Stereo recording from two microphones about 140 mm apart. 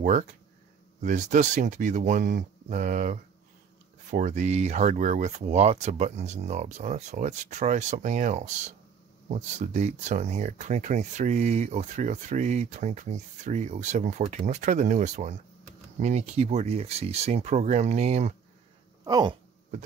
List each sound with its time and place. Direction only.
0.0 s speech: 60° right (ahead or behind)
19.0 s speech: 30° right (ahead or behind)